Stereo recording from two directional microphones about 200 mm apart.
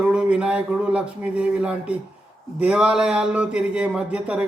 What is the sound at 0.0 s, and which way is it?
Speech, 5° right (ahead or behind).